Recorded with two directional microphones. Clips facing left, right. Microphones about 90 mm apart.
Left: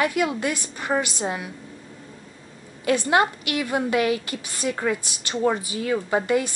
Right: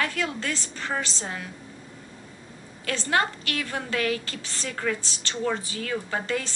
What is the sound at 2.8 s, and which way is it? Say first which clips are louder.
A woman's voice: left 6 dB; 15° left (ahead or behind).